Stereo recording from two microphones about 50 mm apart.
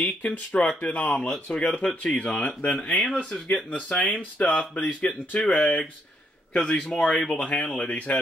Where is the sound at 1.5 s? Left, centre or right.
Centre.